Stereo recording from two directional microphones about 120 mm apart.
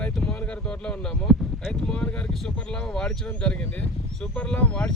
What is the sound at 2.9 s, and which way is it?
Speech, 5° left (ahead or behind).